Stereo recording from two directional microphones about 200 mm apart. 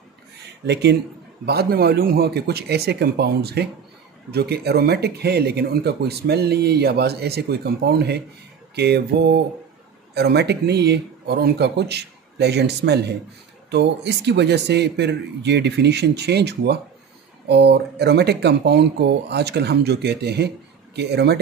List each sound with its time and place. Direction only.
0.6 s speech: 55° right (ahead or behind)
8.7 s mantra: 55° right (ahead or behind)
10.1 s speech: 55° right (ahead or behind)